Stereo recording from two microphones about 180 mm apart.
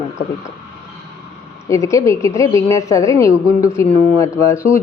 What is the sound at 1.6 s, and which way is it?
A woman's voice, 15° left (ahead or behind).